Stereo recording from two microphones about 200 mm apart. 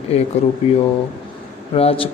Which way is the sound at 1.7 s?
30° left (ahead or behind).